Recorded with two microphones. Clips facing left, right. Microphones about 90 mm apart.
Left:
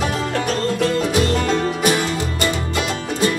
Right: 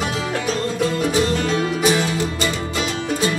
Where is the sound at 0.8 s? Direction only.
60° left (ahead or behind).